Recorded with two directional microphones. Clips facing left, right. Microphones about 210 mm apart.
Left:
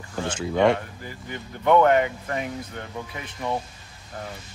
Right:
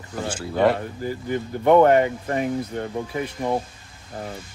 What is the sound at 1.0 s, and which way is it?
Speech, 35° right (ahead or behind).